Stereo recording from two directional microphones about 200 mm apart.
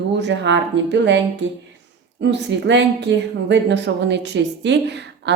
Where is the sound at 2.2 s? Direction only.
60° right (ahead or behind).